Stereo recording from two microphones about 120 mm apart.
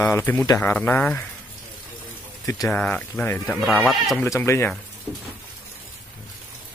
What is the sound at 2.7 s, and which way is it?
Speech, 10° left (ahead or behind).